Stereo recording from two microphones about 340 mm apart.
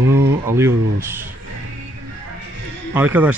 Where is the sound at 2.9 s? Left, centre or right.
Centre.